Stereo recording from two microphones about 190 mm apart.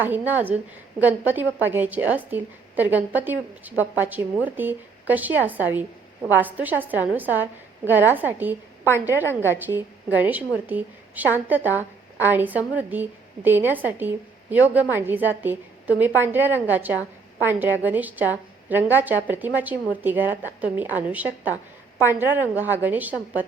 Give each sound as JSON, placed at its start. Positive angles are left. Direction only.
{"t": 0.0, "sound": "a woman's voice", "side_deg": -10}